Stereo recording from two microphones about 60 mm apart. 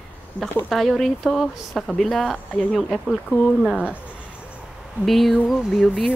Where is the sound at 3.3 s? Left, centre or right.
Centre.